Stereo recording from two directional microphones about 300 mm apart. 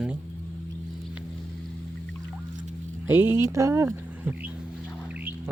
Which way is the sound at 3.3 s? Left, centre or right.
Centre.